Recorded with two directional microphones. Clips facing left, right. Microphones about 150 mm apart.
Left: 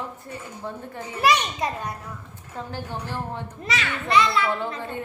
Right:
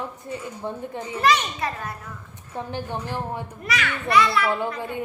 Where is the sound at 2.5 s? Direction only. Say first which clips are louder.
Right 3 dB; 20° right (ahead or behind).